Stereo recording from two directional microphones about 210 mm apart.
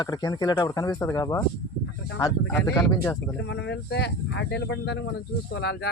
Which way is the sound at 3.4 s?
55° left (ahead or behind).